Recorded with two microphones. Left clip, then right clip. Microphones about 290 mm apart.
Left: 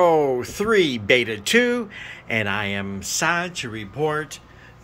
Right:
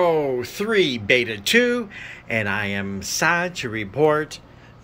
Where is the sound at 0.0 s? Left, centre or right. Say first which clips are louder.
Left 2 dB; centre.